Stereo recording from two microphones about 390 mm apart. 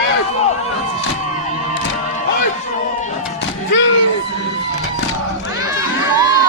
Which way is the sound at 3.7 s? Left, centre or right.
Left.